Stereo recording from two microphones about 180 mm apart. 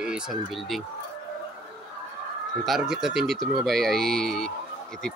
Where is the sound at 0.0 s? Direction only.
Centre (ahead or behind).